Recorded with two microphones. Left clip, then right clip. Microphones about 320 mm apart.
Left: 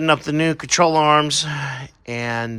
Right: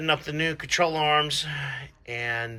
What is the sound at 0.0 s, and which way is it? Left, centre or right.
Speech, left.